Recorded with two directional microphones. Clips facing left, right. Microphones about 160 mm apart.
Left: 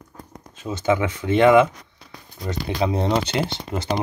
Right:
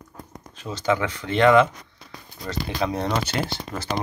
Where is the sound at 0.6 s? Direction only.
15° left (ahead or behind).